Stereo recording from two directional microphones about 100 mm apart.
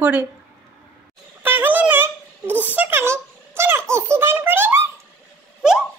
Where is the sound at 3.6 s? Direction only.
25° right (ahead or behind).